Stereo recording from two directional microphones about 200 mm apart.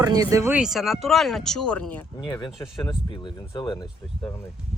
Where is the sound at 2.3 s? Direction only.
20° left (ahead or behind).